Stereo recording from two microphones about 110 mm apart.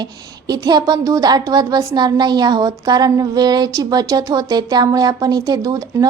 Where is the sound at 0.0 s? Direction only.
40° right (ahead or behind).